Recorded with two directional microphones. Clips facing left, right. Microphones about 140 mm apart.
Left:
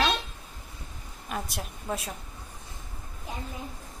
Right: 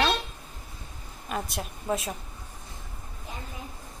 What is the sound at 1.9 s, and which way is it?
Speech, 5° right (ahead or behind).